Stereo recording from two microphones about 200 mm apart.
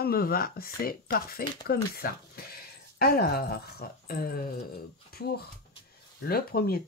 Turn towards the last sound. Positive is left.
turn(degrees=50)  # may be behind; listen again after turning